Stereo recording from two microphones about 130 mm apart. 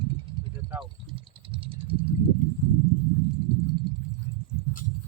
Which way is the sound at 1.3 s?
40° right (ahead or behind).